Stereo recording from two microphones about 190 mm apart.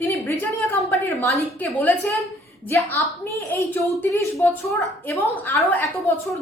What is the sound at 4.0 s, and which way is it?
A woman's voice, 15° left (ahead or behind).